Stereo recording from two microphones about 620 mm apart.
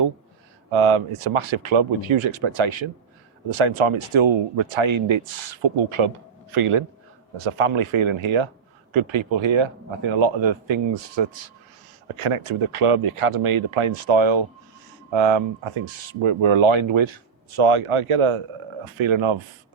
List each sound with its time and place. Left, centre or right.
0.7 s speech: right